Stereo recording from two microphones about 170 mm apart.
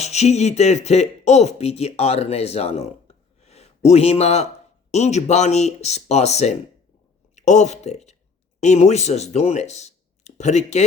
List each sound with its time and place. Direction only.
0.0 s speech: 40° left (ahead or behind)